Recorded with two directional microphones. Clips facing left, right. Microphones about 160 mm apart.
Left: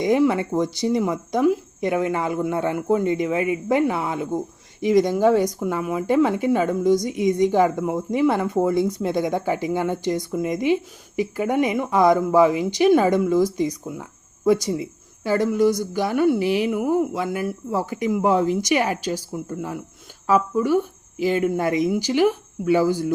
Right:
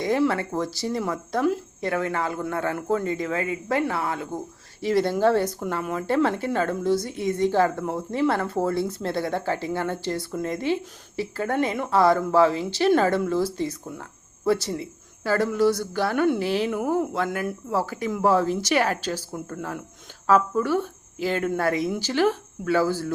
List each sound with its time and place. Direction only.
0.0 s speech: 15° left (ahead or behind)